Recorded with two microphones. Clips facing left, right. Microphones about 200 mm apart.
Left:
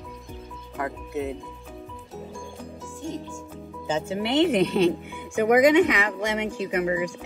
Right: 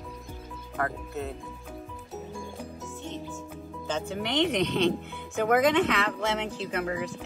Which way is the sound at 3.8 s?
5° left (ahead or behind).